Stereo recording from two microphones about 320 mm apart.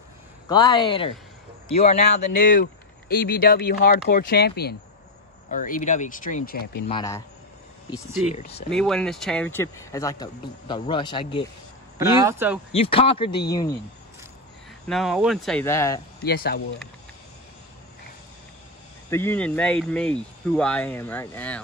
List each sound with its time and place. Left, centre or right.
0.5 s speech: centre
2.2 s speech: left
6.9 s speech: centre
8.4 s speech: centre
8.6 s speech: centre
12.0 s speech: centre
12.7 s speech: centre
14.9 s speech: centre
16.3 s speech: left
19.0 s speech: centre